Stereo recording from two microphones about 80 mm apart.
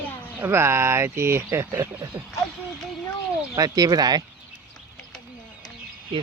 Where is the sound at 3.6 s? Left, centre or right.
Right.